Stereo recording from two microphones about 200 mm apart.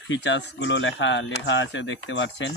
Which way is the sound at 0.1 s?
65° left (ahead or behind).